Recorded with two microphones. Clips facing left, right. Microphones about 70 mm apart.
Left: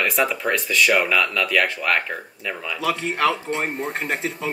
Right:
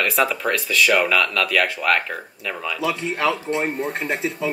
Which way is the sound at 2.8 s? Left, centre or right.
Left.